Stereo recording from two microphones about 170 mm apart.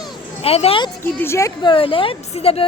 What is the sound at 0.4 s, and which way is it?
Speech, 35° left (ahead or behind).